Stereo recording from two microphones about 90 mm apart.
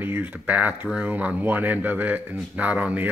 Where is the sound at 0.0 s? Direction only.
20° right (ahead or behind).